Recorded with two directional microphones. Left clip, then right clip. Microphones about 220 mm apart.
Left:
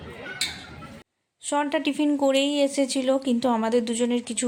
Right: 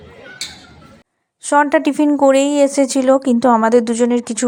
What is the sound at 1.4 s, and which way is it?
Speech, 30° right (ahead or behind).